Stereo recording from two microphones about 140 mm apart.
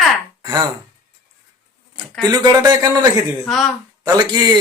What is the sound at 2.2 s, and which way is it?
Speech, 30° right (ahead or behind).